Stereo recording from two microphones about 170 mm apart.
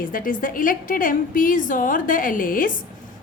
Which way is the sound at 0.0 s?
55° left (ahead or behind).